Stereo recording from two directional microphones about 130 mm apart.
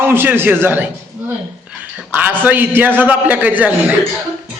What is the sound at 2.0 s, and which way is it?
A man's voice, 15° right (ahead or behind).